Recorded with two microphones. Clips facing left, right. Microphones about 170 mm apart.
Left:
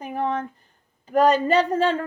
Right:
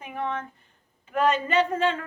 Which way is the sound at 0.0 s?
35° left (ahead or behind).